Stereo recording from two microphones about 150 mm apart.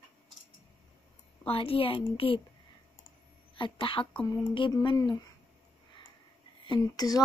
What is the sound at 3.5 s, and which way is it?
Speech, 35° left (ahead or behind).